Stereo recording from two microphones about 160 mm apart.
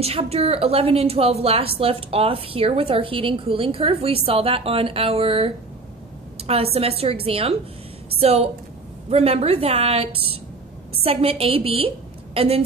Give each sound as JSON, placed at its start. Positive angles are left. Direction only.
{"t": 0.0, "sound": "a woman's voice", "side_deg": -40}